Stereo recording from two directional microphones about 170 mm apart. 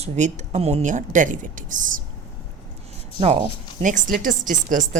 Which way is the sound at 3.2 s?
35° right (ahead or behind).